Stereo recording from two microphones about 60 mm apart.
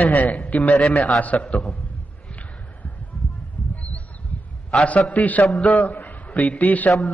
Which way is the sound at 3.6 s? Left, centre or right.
Left.